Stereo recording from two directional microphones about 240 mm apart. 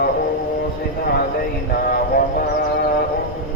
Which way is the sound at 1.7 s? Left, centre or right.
Left.